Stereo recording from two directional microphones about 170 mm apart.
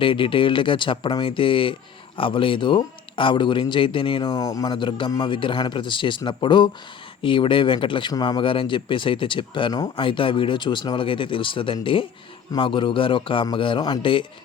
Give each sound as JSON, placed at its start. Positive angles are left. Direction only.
{"t": 0.0, "sound": "a man's voice", "side_deg": 30}